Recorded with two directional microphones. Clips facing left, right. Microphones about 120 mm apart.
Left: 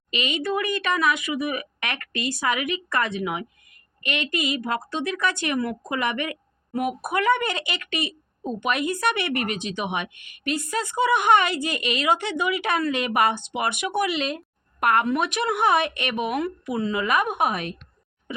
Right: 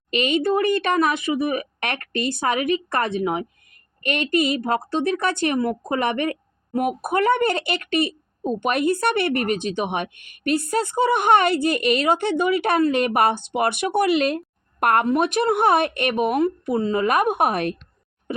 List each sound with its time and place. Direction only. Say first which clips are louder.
0.1 s speech: right 6 dB; 45° right (ahead or behind)
16.4 s speech: right 5 dB; 35° right (ahead or behind); by 17.7 s 50° right (ahead or behind)